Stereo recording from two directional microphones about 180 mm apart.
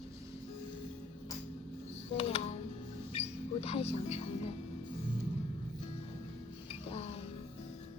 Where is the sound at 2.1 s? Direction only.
35° left (ahead or behind).